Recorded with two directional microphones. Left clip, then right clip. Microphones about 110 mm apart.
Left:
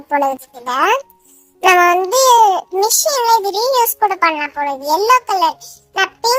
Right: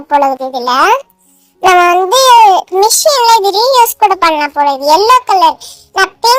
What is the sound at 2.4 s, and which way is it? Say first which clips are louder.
A child's voice: right 7 dB; 25° right (ahead or behind).